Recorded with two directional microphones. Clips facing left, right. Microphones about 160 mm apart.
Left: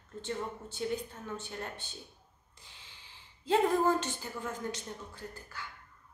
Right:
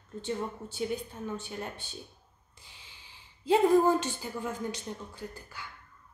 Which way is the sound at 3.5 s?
10° right (ahead or behind).